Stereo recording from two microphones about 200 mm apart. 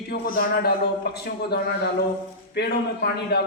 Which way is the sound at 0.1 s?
55° left (ahead or behind).